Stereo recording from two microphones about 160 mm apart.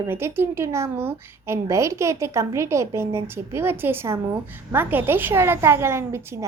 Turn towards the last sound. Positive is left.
turn(degrees=-15)  # may be behind; listen again after turning